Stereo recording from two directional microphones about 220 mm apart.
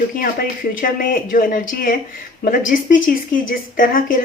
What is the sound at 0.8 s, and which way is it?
Speech, 40° left (ahead or behind).